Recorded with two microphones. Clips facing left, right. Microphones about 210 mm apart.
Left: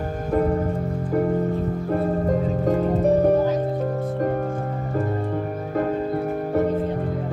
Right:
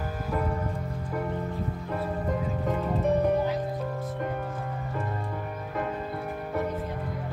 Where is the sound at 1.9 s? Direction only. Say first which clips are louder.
Left 9 dB; 40° left (ahead or behind).